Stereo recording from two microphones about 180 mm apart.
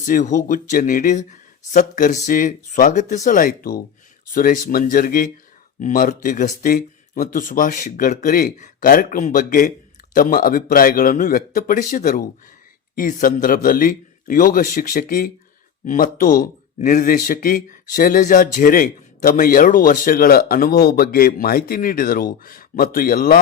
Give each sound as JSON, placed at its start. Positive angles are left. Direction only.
{"t": 0.0, "sound": "speech", "side_deg": 45}